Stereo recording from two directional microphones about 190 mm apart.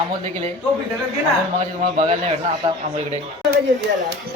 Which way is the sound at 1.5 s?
35° right (ahead or behind).